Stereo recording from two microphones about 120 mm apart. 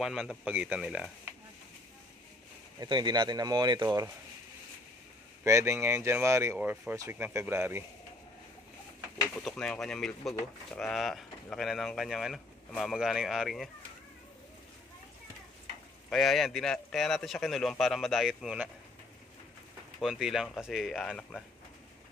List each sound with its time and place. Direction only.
0.0 s a man's voice: centre (ahead or behind)
2.8 s speech: 35° right (ahead or behind)
5.4 s speech: 25° right (ahead or behind)
9.2 s a man's voice: centre (ahead or behind)
16.1 s a man's voice: centre (ahead or behind)
20.0 s a man's voice: centre (ahead or behind)